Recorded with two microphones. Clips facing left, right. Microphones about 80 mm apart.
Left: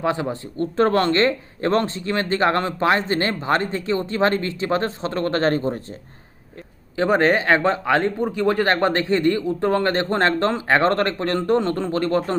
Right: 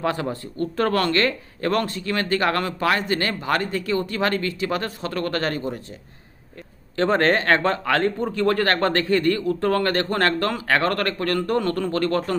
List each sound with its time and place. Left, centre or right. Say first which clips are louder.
0.0 s speech: left 2 dB; centre
6.9 s speech: left 1 dB; centre